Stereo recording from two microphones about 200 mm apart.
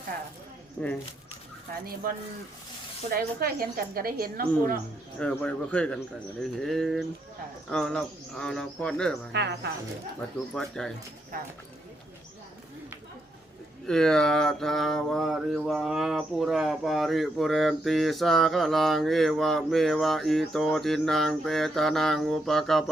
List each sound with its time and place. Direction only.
0.8 s speech: 10° left (ahead or behind)
2.0 s a woman's voice: 45° right (ahead or behind)
5.2 s speech: 5° left (ahead or behind)
9.3 s speech: 60° right (ahead or behind)
10.5 s speech: 5° left (ahead or behind)
13.8 s speech: 5° left (ahead or behind)